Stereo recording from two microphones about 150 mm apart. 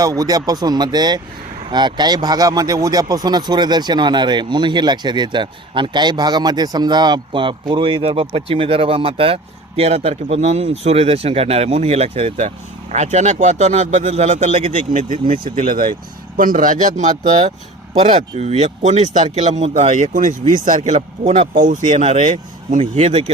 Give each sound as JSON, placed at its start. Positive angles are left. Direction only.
{"t": 0.0, "sound": "speech", "side_deg": -25}
{"t": 22.8, "sound": "speech", "side_deg": -40}